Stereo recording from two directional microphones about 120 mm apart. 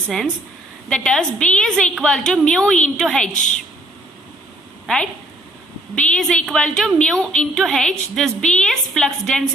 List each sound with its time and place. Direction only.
0.9 s a woman's voice: 5° left (ahead or behind)
3.3 s a woman's voice: 90° left
6.0 s a woman's voice: 5° left (ahead or behind)